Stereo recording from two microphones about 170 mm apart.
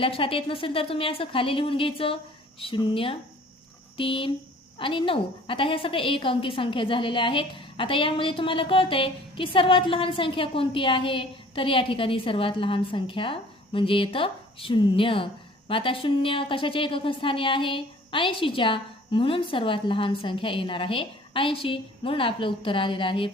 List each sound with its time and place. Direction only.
0.0 s a woman's voice: 30° left (ahead or behind)